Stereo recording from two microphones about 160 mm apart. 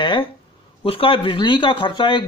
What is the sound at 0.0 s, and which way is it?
Speech, 30° left (ahead or behind).